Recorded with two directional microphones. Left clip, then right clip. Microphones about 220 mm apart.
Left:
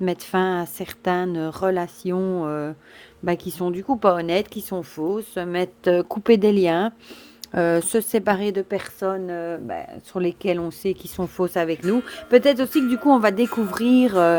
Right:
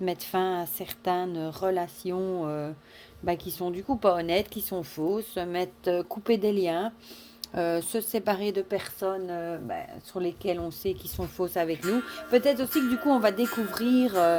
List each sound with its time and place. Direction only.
0.0 s speech: 35° left (ahead or behind)